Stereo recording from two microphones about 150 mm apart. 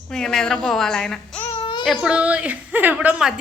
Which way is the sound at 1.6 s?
30° left (ahead or behind).